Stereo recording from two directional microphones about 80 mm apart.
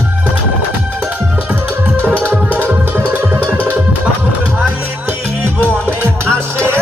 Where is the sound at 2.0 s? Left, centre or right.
Right.